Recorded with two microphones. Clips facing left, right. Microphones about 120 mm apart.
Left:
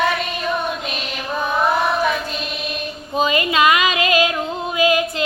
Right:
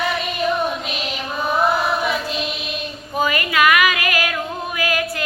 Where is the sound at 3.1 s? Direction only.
20° left (ahead or behind).